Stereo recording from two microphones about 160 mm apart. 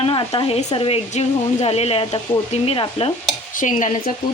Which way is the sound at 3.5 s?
50° left (ahead or behind).